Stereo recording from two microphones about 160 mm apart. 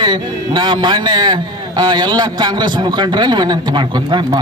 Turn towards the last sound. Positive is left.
turn(degrees=-30)  # may be behind; listen again after turning